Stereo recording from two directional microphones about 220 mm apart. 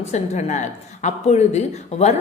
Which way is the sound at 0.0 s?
30° left (ahead or behind).